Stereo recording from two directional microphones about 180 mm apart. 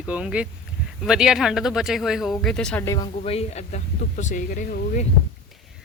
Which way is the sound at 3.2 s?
35° left (ahead or behind).